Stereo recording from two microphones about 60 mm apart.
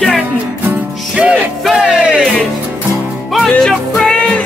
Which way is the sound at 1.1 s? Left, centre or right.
Centre.